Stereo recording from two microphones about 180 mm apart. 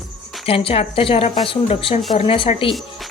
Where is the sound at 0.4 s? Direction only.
30° left (ahead or behind).